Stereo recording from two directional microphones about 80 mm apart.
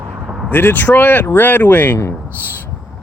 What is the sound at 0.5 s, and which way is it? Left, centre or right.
Speech, left.